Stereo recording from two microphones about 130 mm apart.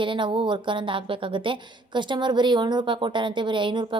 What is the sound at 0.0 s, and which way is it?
A woman's voice, 40° right (ahead or behind).